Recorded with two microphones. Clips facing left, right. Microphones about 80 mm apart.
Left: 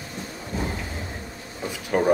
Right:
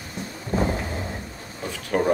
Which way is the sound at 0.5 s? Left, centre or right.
Right.